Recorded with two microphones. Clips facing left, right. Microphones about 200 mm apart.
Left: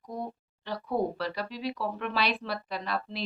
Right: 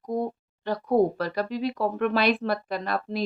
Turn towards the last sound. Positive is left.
turn(degrees=-45)  # may be behind; listen again after turning